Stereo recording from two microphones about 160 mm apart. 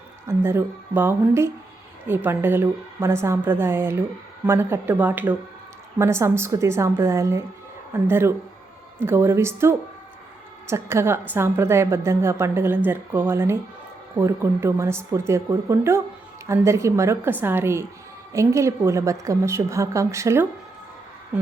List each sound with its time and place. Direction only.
0.3 s a woman's voice: 15° right (ahead or behind)